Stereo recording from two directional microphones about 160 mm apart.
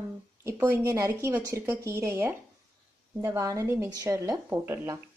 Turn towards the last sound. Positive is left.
turn(degrees=-15)  # may be behind; listen again after turning